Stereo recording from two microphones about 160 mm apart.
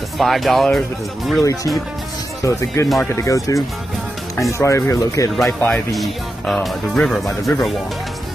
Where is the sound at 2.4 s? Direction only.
20° left (ahead or behind).